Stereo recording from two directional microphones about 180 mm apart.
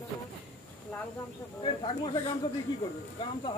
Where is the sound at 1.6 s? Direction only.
25° left (ahead or behind).